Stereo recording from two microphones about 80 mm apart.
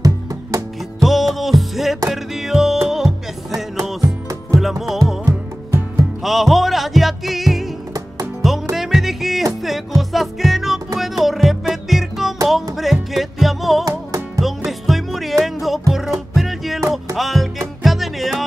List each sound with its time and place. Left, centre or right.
0.0 s music: right
1.0 s music: centre
4.0 s music: right
4.6 s music: centre
6.2 s music: centre
8.7 s music: centre
13.8 s music: right
14.4 s music: centre